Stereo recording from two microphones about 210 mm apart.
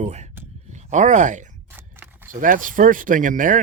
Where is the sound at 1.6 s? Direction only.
10° right (ahead or behind).